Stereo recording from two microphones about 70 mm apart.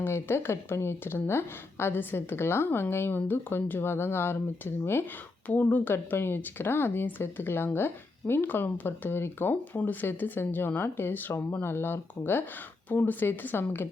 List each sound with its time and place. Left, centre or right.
0.0 s speech: left
5.5 s a woman's voice: left